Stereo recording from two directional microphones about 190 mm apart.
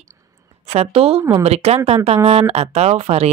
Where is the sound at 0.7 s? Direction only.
30° right (ahead or behind).